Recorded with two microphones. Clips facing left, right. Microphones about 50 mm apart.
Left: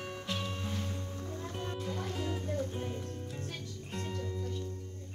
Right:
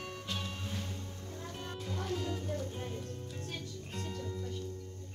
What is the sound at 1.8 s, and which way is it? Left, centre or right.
Music, centre.